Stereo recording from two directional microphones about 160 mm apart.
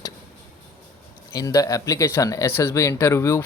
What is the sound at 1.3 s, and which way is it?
Speech, 25° left (ahead or behind).